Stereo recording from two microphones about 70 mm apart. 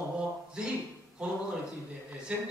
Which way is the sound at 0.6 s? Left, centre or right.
Centre.